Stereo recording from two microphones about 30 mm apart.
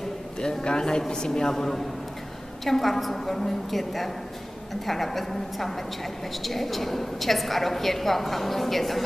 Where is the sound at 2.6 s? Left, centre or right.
Centre.